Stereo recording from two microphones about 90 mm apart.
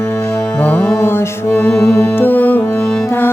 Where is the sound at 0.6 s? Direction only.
20° left (ahead or behind).